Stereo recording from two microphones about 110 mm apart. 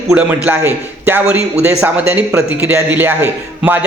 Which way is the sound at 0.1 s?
15° right (ahead or behind).